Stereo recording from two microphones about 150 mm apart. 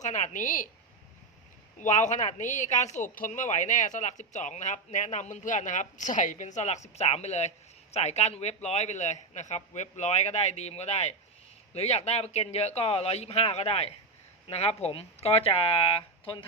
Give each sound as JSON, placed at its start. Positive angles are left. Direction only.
{"t": 0.0, "sound": "a woman's voice", "side_deg": 55}
{"t": 1.8, "sound": "speech", "side_deg": 55}